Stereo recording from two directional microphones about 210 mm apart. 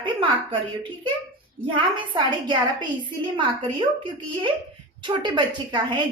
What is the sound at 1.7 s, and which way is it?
A woman's voice, 25° right (ahead or behind).